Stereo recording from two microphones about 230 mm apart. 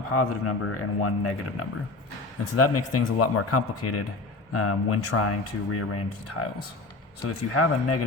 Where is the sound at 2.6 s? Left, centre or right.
Left.